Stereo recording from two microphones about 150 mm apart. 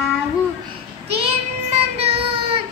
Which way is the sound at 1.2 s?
40° right (ahead or behind).